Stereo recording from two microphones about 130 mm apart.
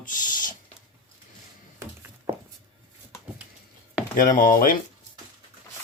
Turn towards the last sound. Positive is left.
turn(degrees=90)